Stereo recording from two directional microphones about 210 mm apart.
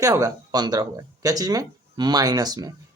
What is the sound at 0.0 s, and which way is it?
Speech, 15° right (ahead or behind).